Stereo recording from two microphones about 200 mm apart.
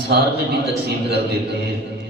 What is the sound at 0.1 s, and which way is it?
Speech, 55° right (ahead or behind).